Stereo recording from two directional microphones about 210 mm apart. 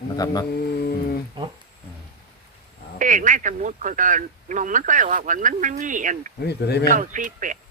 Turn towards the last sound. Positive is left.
turn(degrees=-40)  # may be behind; listen again after turning